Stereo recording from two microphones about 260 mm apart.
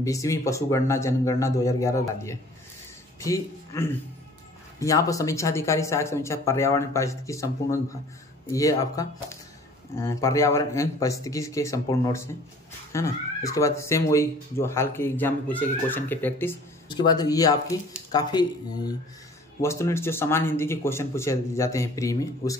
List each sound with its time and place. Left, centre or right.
0.0 s speech: centre
19.6 s speech: centre